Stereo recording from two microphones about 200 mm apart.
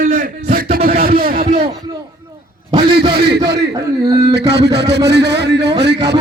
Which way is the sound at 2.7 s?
20° right (ahead or behind).